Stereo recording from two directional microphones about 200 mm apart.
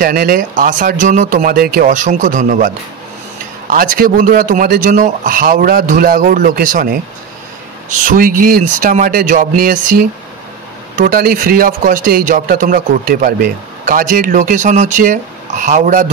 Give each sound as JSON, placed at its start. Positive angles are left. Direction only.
{"t": 0.0, "sound": "a man's voice", "side_deg": -45}
{"t": 8.0, "sound": "a man's voice", "side_deg": -45}
{"t": 11.0, "sound": "speech", "side_deg": -45}